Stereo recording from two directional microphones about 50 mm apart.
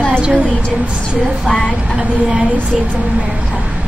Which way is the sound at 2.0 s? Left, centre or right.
Centre.